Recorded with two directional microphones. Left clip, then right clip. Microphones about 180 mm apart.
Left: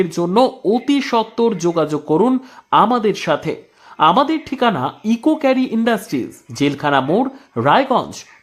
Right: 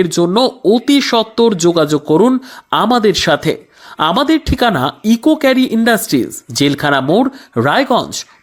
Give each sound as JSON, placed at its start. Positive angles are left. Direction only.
{"t": 0.0, "sound": "speech", "side_deg": -20}